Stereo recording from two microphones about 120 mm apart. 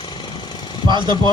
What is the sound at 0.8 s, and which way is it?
Speech, 40° right (ahead or behind).